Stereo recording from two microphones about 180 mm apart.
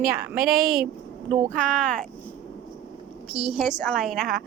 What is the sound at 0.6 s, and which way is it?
Speech, 55° right (ahead or behind).